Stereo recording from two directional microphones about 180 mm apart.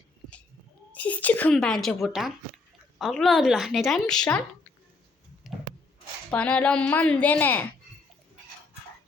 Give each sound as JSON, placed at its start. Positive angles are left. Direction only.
{"t": 0.9, "sound": "speech", "side_deg": 10}
{"t": 5.5, "sound": "wood", "side_deg": 0}
{"t": 6.3, "sound": "a woman's voice", "side_deg": 5}